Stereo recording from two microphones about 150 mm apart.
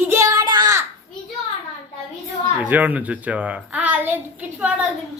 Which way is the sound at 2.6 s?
10° right (ahead or behind).